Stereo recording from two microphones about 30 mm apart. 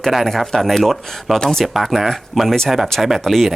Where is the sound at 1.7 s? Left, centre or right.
Centre.